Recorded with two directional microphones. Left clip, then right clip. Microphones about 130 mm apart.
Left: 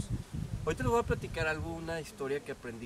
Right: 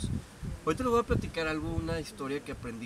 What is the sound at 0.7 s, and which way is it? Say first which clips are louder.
Speech: right 3 dB; 30° left (ahead or behind).